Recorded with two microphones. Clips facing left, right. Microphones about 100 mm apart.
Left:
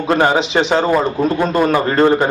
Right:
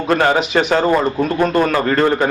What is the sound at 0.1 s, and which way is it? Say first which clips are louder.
A man's voice: left 1 dB; 25° left (ahead or behind).